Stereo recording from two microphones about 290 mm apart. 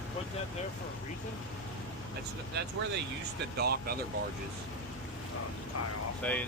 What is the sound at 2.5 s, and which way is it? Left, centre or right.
Speech, right.